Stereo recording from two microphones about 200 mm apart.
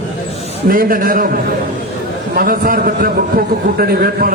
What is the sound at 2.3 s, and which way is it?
A man's voice, 45° right (ahead or behind).